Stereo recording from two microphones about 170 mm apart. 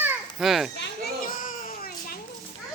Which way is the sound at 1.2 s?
55° left (ahead or behind).